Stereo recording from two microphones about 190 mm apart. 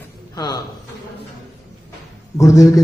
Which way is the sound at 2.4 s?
15° left (ahead or behind).